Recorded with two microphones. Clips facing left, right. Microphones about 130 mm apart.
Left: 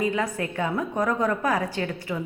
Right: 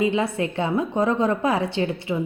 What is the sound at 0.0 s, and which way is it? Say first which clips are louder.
A woman's voice: right 4 dB; 25° right (ahead or behind).